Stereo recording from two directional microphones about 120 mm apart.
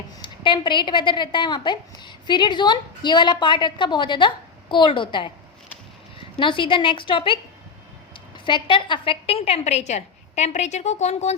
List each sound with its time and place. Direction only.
0.2 s a woman's voice: 45° left (ahead or behind)
6.3 s a woman's voice: 45° left (ahead or behind)
8.4 s a woman's voice: 45° left (ahead or behind); by 11.3 s 65° left (ahead or behind)